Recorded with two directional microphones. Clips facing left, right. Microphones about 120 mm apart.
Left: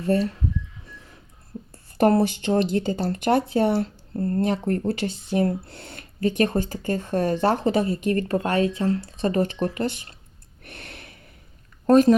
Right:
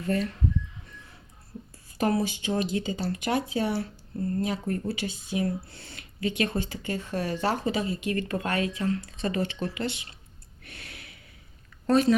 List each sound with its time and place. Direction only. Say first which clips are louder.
0.0 s speech: left 6 dB; 35° left (ahead or behind)
1.7 s speech: left 7 dB; 55° left (ahead or behind)
10.7 s a sound: left 5 dB; 55° left (ahead or behind)
11.9 s speech: left 6 dB; 45° left (ahead or behind)